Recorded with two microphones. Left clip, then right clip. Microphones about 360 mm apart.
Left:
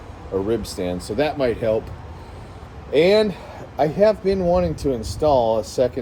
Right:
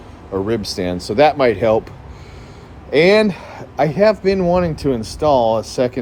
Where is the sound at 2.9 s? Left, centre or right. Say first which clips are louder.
Right 4 dB; centre.